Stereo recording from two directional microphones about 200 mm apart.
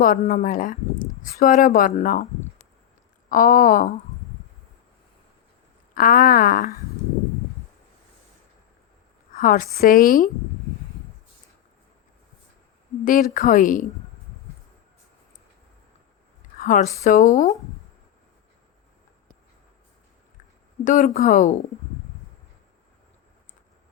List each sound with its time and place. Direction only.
0.0 s speech: 40° left (ahead or behind)
3.2 s speech: 40° left (ahead or behind)
5.9 s speech: 45° left (ahead or behind)
9.3 s a woman's voice: 40° left (ahead or behind)
13.1 s speech: 40° left (ahead or behind)
16.6 s speech: 40° left (ahead or behind)
20.8 s speech: 40° left (ahead or behind)